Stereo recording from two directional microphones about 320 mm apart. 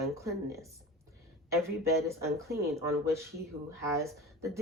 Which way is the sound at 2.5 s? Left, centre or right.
Right.